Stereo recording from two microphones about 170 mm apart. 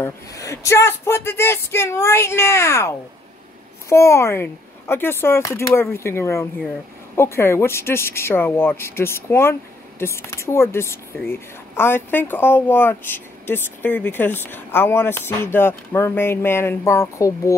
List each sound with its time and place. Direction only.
0.0 s speech: 20° left (ahead or behind)
3.9 s speech: 15° left (ahead or behind)